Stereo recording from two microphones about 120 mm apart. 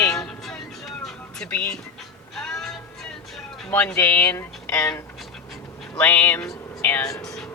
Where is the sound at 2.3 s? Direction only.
5° left (ahead or behind).